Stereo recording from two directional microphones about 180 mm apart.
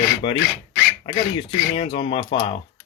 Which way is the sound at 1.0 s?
30° left (ahead or behind).